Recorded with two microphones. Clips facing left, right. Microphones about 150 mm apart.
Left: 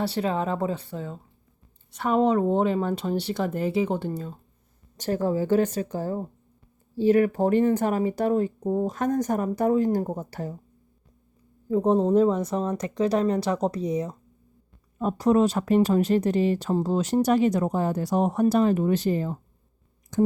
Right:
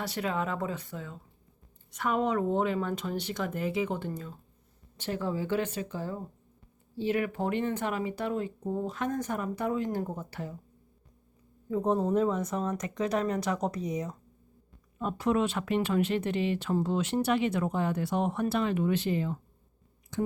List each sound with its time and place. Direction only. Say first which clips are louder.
0.0 s speech: left 6 dB; 30° left (ahead or behind)
11.7 s speech: left 6 dB; 30° left (ahead or behind)
20.1 s a sound: left 9 dB; 45° left (ahead or behind)